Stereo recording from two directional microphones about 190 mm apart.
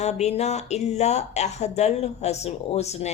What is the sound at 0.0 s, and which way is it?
A woman's voice, 35° left (ahead or behind).